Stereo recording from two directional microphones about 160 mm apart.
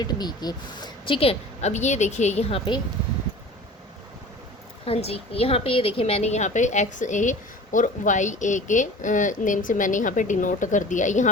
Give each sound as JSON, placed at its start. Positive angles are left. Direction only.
{"t": 0.0, "sound": "a woman's voice", "side_deg": 25}
{"t": 4.9, "sound": "a woman's voice", "side_deg": 40}